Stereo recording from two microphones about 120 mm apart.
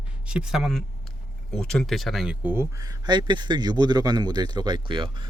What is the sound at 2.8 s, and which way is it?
Speech, 35° right (ahead or behind).